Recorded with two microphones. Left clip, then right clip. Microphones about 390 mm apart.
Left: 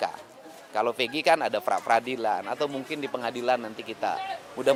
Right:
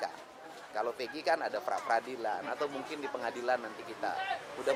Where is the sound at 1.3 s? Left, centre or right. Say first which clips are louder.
Left 8 dB; left.